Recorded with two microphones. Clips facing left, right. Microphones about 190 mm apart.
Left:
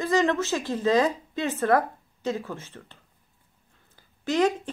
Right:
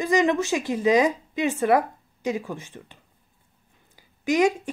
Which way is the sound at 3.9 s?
10° right (ahead or behind).